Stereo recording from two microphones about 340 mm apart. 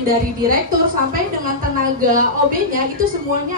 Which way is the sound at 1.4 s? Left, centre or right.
Right.